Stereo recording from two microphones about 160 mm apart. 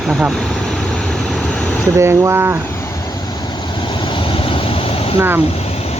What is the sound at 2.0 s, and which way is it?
Speech, 15° right (ahead or behind).